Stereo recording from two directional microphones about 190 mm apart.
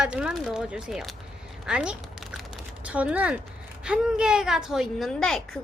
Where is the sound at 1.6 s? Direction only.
5° right (ahead or behind).